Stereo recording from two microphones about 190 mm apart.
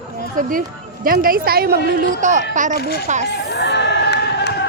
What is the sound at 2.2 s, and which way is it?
Speech, 40° right (ahead or behind).